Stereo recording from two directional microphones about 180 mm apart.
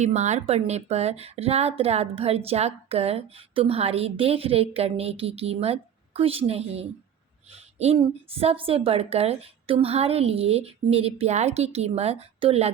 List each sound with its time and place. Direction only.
0.0 s a woman's voice: 40° right (ahead or behind)
7.5 s a sound: 35° right (ahead or behind)
7.9 s a woman's voice: 35° right (ahead or behind)